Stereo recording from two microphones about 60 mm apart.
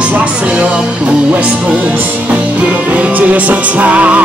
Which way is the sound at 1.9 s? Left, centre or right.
Right.